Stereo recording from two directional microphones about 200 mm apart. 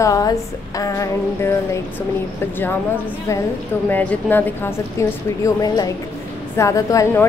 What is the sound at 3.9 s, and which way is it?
A woman's voice, 10° left (ahead or behind).